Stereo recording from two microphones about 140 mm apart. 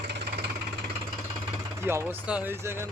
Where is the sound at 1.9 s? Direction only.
15° right (ahead or behind).